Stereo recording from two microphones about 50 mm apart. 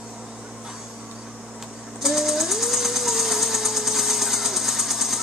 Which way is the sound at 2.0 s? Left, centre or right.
Centre.